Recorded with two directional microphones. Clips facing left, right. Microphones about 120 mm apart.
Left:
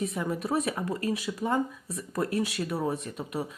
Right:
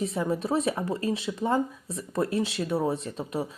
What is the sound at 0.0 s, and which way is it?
Speech, 30° right (ahead or behind).